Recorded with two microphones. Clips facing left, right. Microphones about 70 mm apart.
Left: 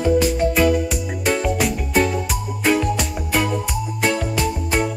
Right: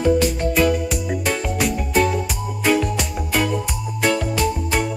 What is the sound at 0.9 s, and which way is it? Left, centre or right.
Music, centre.